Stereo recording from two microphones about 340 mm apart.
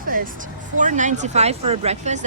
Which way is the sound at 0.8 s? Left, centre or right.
Right.